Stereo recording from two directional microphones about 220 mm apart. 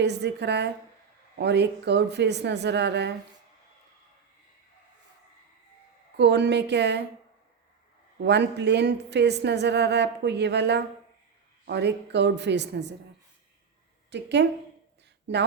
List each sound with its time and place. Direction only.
0.0 s a woman's voice: 50° right (ahead or behind)
6.1 s a woman's voice: 50° right (ahead or behind)
8.2 s a woman's voice: 50° right (ahead or behind)
14.1 s a woman's voice: 50° right (ahead or behind)